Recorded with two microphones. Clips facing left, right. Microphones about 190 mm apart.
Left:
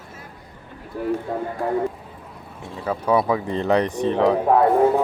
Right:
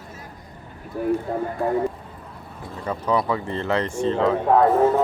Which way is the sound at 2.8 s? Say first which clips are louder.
Left 3 dB; 5° left (ahead or behind).